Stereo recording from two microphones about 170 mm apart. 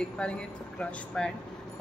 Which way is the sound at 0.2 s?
5° left (ahead or behind).